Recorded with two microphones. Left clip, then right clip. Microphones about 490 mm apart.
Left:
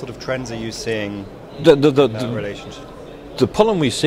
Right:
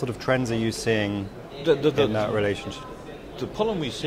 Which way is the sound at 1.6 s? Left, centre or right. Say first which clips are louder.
Left 9 dB; left.